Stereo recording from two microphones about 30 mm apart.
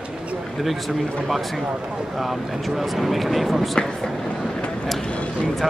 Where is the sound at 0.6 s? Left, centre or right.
Centre.